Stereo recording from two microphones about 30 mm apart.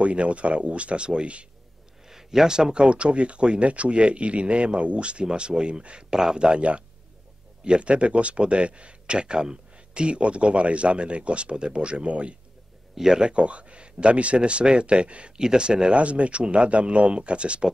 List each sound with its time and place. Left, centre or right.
0.0 s speech: right
2.0 s speech: centre
2.8 s speech: right
6.0 s speech: centre
6.3 s speech: right
12.9 s speech: centre
13.2 s speech: right
16.0 s speech: right